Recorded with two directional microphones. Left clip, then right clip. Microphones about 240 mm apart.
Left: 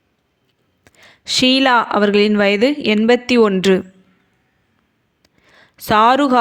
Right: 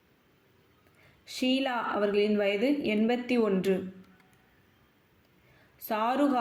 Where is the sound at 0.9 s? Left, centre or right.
Left.